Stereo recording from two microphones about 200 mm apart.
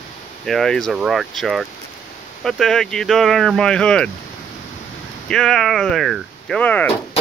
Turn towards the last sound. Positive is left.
turn(degrees=5)  # may be behind; listen again after turning